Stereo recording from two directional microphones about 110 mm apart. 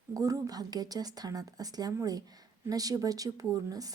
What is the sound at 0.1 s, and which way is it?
A woman's voice, 30° right (ahead or behind).